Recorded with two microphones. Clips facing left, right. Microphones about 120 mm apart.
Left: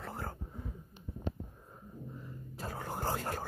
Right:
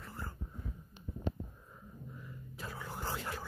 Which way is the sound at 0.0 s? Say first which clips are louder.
Left 5 dB; 80° left.